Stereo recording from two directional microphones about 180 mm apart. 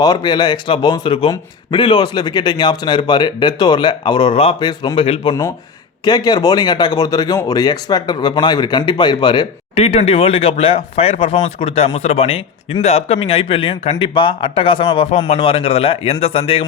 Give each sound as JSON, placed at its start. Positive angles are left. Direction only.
{"t": 0.0, "sound": "a man's voice", "side_deg": 25}